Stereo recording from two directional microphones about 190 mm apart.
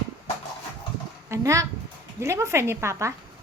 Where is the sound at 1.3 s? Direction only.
15° right (ahead or behind).